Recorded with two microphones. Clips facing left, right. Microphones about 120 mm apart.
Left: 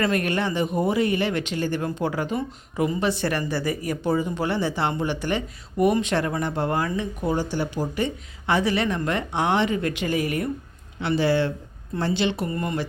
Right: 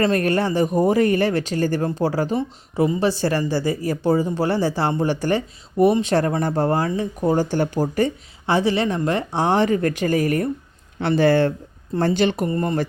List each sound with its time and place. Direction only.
0.0 s speech: 35° right (ahead or behind)
12.5 s speech: 35° right (ahead or behind)